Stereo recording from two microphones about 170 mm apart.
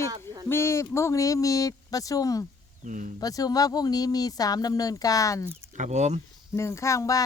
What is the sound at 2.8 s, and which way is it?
Speech, 50° right (ahead or behind).